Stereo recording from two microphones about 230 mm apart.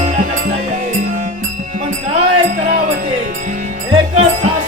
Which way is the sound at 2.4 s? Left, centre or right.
Right.